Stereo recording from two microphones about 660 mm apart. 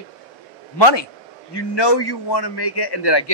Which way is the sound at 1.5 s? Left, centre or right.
Left.